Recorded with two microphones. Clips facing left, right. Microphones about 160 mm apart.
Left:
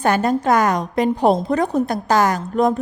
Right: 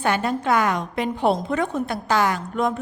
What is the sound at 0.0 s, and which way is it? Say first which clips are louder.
A woman's voice: left 5 dB; 40° left (ahead or behind).